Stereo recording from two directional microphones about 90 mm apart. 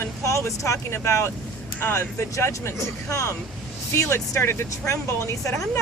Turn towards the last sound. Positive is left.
turn(degrees=35)  # may be behind; listen again after turning